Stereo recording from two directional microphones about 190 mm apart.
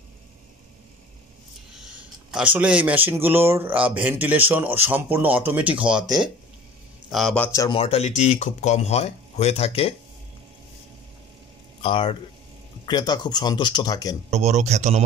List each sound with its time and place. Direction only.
2.0 s speech: 10° right (ahead or behind)
7.1 s a man's voice: centre (ahead or behind)
7.6 s speech: 30° left (ahead or behind)
11.8 s speech: 30° left (ahead or behind)
14.3 s speech: 35° right (ahead or behind)